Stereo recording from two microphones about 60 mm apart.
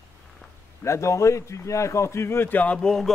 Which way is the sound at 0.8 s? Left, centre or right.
Left.